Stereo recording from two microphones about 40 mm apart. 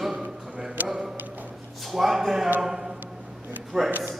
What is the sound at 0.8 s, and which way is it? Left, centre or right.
Speech, right.